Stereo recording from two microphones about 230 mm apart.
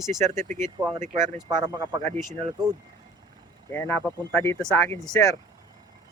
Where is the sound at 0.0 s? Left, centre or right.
Centre.